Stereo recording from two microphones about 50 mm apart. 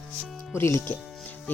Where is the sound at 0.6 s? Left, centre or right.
Left.